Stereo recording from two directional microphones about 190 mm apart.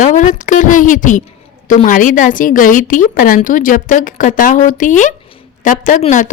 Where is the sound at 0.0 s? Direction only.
40° left (ahead or behind).